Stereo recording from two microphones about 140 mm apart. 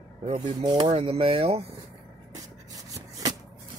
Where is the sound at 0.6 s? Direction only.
30° right (ahead or behind).